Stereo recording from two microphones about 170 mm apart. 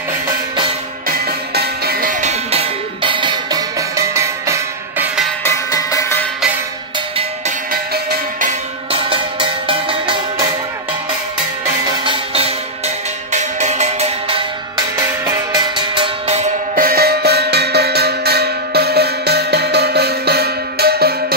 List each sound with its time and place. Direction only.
1.0 s music: 60° right (ahead or behind)
2.5 s music: 35° right (ahead or behind); by 5.3 s 5° right (ahead or behind)
5.4 s music: 20° left (ahead or behind)
8.9 s music: 30° right (ahead or behind)
12.0 s music: 30° right (ahead or behind)
15.2 s music: 25° right (ahead or behind)
16.7 s music: 60° right (ahead or behind)